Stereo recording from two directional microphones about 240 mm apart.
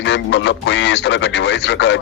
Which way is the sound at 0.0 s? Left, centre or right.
Left.